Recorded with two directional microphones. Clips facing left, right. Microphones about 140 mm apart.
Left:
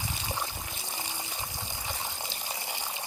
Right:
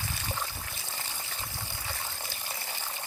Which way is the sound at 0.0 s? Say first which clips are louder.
Left 1 dB; 15° left (ahead or behind).